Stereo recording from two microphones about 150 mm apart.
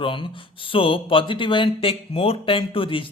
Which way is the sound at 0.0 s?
35° left (ahead or behind).